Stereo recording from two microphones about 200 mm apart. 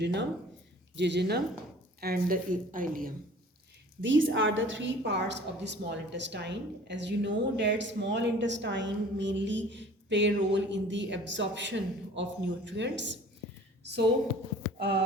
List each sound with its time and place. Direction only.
0.0 s a woman's voice: 60° right (ahead or behind)
2.0 s a woman's voice: 45° right (ahead or behind)
4.0 s a woman's voice: 70° right (ahead or behind)